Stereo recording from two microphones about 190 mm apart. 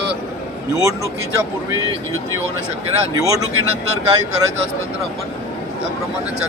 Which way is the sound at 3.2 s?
20° right (ahead or behind).